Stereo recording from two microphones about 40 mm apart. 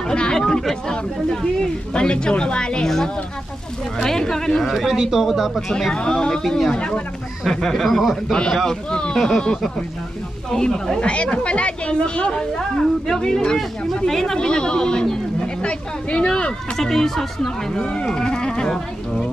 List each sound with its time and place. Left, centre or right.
0.0 s a woman's voice: left
4.0 s speech: centre
4.9 s speech: centre
5.2 s speech: centre
5.7 s speech: centre
5.9 s a woman's voice: left
7.4 s speech: centre
8.9 s a woman's voice: centre
11.0 s a woman's voice: left
16.7 s a woman's voice: centre